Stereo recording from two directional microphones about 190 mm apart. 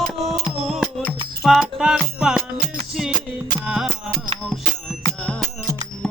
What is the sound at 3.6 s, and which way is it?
Music, 5° right (ahead or behind).